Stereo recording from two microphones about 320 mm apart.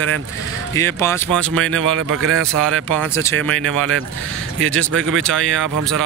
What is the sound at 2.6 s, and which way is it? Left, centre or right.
Speech, centre.